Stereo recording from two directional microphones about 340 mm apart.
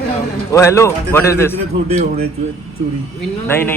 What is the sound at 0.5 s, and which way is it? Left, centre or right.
Speech, centre.